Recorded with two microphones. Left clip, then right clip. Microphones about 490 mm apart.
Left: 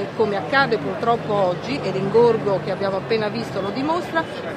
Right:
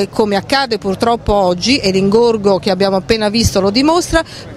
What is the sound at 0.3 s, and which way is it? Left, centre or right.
Speech, right.